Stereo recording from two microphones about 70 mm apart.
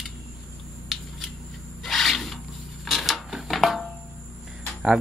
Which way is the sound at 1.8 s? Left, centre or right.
Centre.